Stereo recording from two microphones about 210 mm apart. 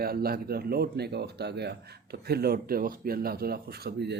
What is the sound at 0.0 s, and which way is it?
A man's voice, 45° right (ahead or behind).